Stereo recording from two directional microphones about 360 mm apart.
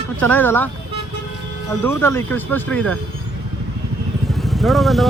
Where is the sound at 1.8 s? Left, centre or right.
Centre.